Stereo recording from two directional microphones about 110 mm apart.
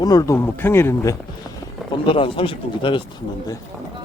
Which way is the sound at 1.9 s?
50° left (ahead or behind).